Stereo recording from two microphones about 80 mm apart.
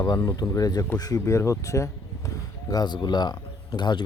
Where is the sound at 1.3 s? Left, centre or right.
Left.